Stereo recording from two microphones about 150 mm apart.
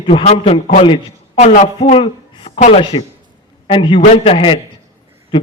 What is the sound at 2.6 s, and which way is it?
Speech, 45° left (ahead or behind).